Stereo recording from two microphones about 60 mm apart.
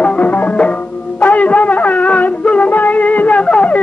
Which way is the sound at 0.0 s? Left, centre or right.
Left.